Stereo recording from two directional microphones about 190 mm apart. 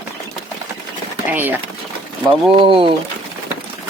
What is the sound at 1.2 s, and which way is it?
Speech, 10° right (ahead or behind).